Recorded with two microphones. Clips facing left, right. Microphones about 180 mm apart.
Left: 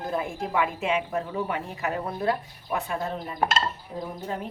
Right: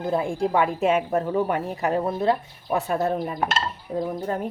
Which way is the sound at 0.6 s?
45° right (ahead or behind).